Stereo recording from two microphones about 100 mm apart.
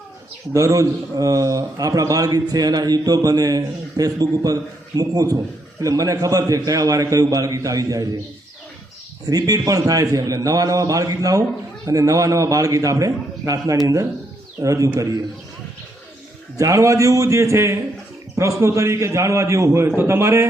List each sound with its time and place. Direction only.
0.5 s a man's voice: 35° right (ahead or behind)
9.2 s a man's voice: 40° right (ahead or behind)
16.6 s a man's voice: 30° right (ahead or behind)